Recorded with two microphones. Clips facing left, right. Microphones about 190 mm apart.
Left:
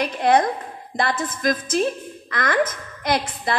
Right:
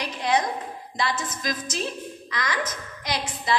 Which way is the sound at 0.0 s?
55° left (ahead or behind).